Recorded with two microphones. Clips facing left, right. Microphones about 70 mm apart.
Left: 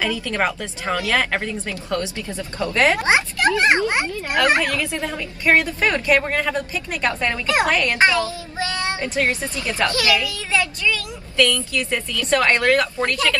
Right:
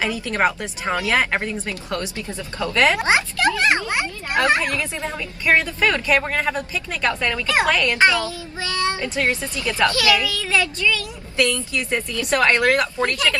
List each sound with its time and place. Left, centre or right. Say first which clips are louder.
0.0 s speech: right 1 dB; right
2.7 s a woman's voice: even; left
4.6 s speech: left 2 dB; right
5.4 s a woman's voice: left 1 dB; left
5.8 s a woman's voice: left 1 dB; left
11.3 s speech: left 2 dB; right